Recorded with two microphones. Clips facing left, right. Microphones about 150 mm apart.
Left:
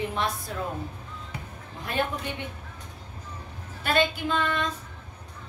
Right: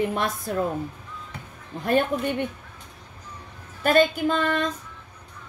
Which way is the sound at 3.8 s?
45° right (ahead or behind).